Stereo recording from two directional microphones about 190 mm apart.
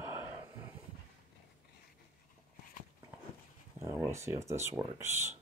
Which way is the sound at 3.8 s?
15° right (ahead or behind).